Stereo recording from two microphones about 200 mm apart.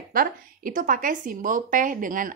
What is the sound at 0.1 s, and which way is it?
A woman's voice, 45° right (ahead or behind).